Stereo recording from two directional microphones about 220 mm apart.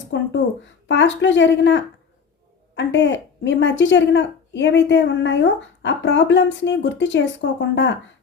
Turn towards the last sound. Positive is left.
turn(degrees=55)  # may be behind; listen again after turning